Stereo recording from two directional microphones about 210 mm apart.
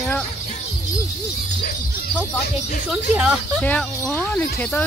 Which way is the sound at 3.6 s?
5° left (ahead or behind).